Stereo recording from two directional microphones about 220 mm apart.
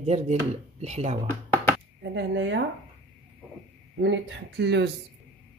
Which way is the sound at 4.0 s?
50° right (ahead or behind).